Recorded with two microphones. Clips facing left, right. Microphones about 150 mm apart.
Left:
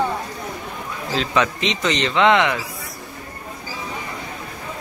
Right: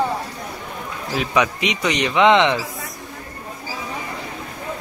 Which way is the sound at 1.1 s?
15° right (ahead or behind).